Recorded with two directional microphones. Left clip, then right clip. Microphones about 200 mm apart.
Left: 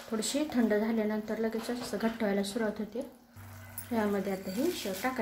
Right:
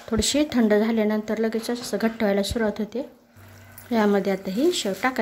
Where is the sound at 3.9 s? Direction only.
45° right (ahead or behind).